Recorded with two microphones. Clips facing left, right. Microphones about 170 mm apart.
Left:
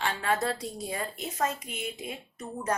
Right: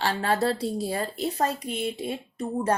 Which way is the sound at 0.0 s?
35° right (ahead or behind).